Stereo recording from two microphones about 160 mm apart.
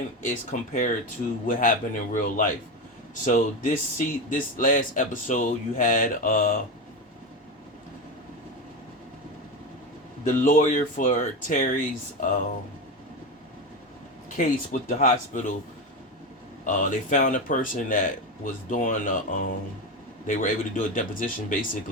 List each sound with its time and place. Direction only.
0.2 s speech: 55° left (ahead or behind)
10.2 s speech: 55° left (ahead or behind)
14.3 s speech: 55° left (ahead or behind)
16.6 s speech: 55° left (ahead or behind)